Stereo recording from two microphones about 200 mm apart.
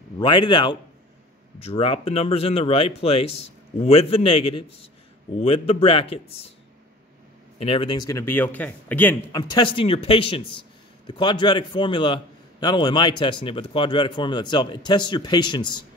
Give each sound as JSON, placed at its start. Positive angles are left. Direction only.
{"t": 0.2, "sound": "a man's voice", "side_deg": 25}
{"t": 7.5, "sound": "a man's voice", "side_deg": 30}
{"t": 9.4, "sound": "a man's voice", "side_deg": 25}